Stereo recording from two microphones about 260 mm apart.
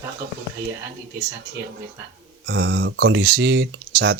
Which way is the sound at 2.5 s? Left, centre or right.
Right.